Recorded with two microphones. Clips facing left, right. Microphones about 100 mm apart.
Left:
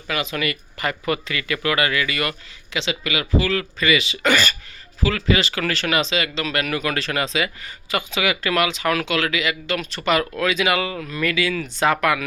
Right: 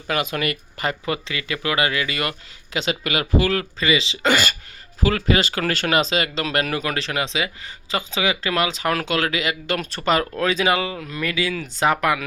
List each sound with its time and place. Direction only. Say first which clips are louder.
0.1 s speech: right 1 dB; 40° right (ahead or behind)
1.0 s speech: left 2 dB; 20° right (ahead or behind)
2.7 s speech: right 1 dB; 45° right (ahead or behind)
3.8 s speech: left 1 dB; 25° right (ahead or behind)
5.0 s speech: right 1 dB; 40° right (ahead or behind)
6.9 s speech: left 1 dB; 20° right (ahead or behind); by 10.0 s 45° right (ahead or behind)
10.1 s speech: even; 35° right (ahead or behind)